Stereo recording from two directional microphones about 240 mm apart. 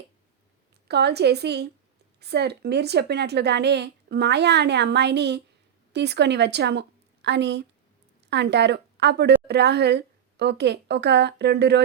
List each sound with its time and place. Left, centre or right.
0.9 s a woman's voice: right